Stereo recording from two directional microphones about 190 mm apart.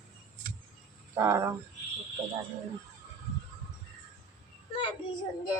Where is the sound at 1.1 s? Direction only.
15° right (ahead or behind).